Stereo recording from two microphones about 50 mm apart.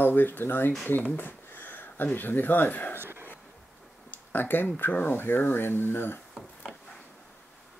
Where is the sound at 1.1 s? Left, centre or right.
Left.